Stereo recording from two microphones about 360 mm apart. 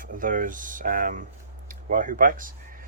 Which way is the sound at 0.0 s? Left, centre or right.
Right.